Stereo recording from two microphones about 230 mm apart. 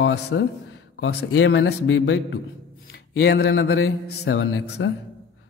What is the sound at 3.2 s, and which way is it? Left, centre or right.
Speech, left.